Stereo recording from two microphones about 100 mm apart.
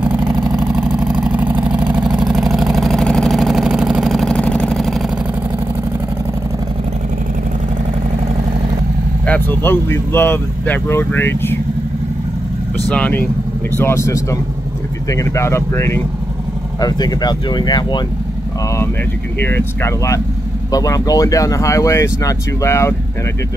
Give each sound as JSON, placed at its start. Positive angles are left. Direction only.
{"t": 0.4, "sound": "vehicle", "side_deg": -40}
{"t": 0.7, "sound": "vehicle", "side_deg": -10}
{"t": 4.4, "sound": "vehicle", "side_deg": 10}
{"t": 9.2, "sound": "speech", "side_deg": 15}
{"t": 12.9, "sound": "speech", "side_deg": 15}
{"t": 13.7, "sound": "speech", "side_deg": 25}
{"t": 16.8, "sound": "speech", "side_deg": 45}
{"t": 19.4, "sound": "speech", "side_deg": 25}
{"t": 20.7, "sound": "speech", "side_deg": 35}